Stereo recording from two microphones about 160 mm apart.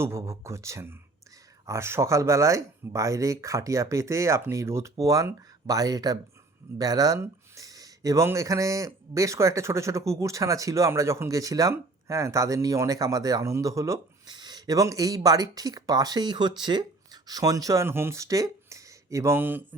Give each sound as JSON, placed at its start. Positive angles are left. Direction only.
{"t": 0.0, "sound": "speech", "side_deg": -15}